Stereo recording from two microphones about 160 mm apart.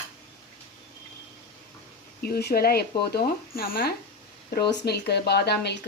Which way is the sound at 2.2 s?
75° left (ahead or behind).